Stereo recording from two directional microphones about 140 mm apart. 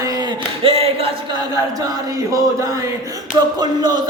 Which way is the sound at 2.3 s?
25° right (ahead or behind).